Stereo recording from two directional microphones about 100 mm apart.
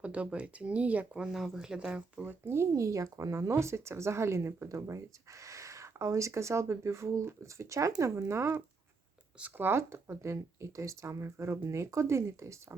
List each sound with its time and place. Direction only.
0.0 s speech: 15° right (ahead or behind); by 12.5 s 30° right (ahead or behind)